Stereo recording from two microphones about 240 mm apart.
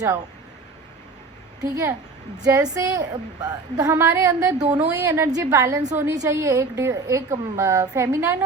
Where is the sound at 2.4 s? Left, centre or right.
Centre.